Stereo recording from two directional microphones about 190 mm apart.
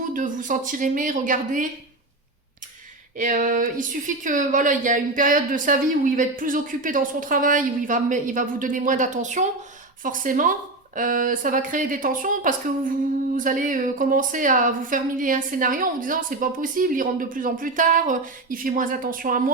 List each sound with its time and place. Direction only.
0.1 s speech: 45° right (ahead or behind)
3.2 s speech: 45° right (ahead or behind)